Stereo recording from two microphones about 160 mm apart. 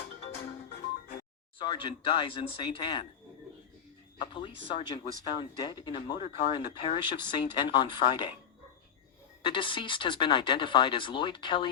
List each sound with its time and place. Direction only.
1.5 s speech: 30° left (ahead or behind)
4.2 s speech: 30° left (ahead or behind)
9.4 s speech: 30° left (ahead or behind)